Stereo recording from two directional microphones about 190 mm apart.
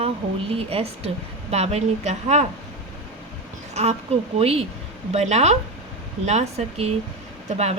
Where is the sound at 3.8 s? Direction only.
35° right (ahead or behind).